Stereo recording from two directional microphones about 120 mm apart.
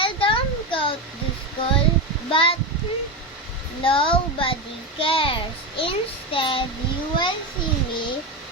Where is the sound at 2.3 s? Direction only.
45° left (ahead or behind).